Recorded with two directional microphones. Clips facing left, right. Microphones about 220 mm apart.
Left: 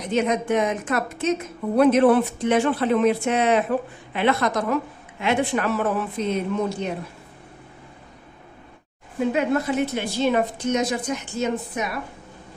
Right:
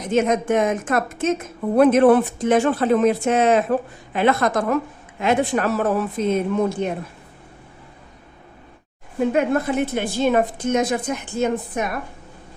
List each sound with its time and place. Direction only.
0.0 s a woman's voice: 45° right (ahead or behind)
9.3 s a woman's voice: 50° right (ahead or behind)